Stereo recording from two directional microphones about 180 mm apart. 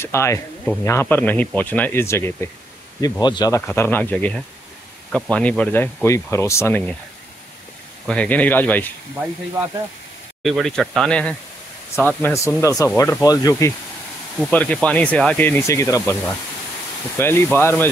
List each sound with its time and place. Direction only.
0.0 s speech: 15° left (ahead or behind)
8.1 s speech: 5° left (ahead or behind)
10.4 s speech: centre (ahead or behind); by 16.2 s 15° left (ahead or behind)
17.2 s speech: 10° left (ahead or behind)